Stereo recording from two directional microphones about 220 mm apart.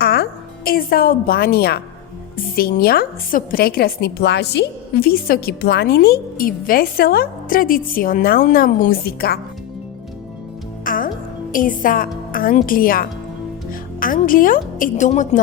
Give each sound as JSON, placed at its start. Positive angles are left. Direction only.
{"t": 0.0, "sound": "music", "side_deg": 45}
{"t": 2.6, "sound": "a woman's voice", "side_deg": 45}
{"t": 10.8, "sound": "music", "side_deg": 40}
{"t": 11.5, "sound": "a woman's voice", "side_deg": 40}